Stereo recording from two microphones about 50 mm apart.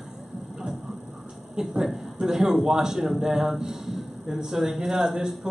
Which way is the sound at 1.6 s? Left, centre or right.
Centre.